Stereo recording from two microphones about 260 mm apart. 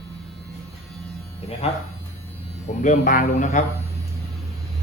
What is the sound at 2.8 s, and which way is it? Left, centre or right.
Speech, left.